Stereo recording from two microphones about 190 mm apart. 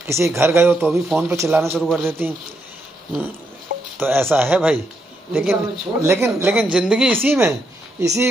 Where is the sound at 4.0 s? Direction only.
10° right (ahead or behind).